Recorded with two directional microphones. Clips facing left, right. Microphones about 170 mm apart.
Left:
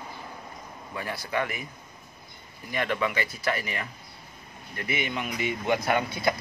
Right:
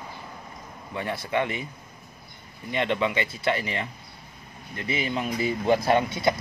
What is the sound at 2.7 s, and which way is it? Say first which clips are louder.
Speech: right 3 dB; 25° right (ahead or behind).